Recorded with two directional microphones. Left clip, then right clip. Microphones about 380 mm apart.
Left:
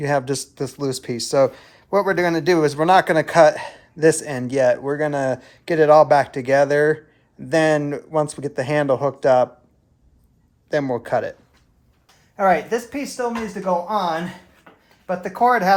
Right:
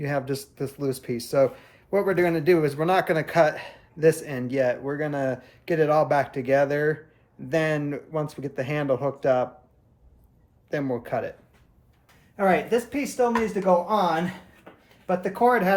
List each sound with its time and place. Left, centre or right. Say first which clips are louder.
0.0 s speech: left 7 dB; centre
10.7 s speech: left 7 dB; centre
12.4 s speech: left 4 dB; centre